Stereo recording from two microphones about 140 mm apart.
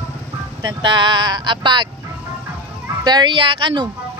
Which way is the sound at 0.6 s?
30° right (ahead or behind).